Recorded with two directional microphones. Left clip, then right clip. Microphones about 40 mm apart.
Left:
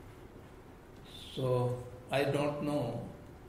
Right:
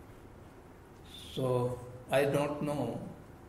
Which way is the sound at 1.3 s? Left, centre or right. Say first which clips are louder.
Right 1 dB; right.